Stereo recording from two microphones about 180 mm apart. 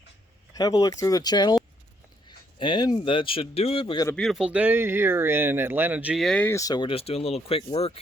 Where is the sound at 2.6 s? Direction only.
25° left (ahead or behind).